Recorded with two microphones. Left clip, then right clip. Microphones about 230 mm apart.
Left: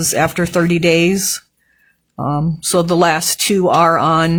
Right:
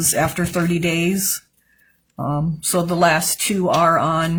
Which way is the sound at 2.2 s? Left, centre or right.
Left.